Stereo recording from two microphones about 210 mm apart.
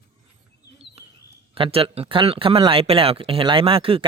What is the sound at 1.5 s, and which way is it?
Speech, 25° right (ahead or behind).